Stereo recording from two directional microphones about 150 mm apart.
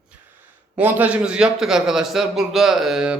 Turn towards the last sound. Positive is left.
turn(degrees=-5)  # may be behind; listen again after turning